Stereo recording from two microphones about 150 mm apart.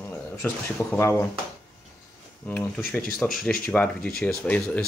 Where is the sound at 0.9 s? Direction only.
15° left (ahead or behind).